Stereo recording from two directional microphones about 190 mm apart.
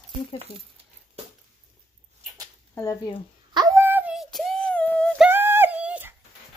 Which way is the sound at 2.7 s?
15° left (ahead or behind).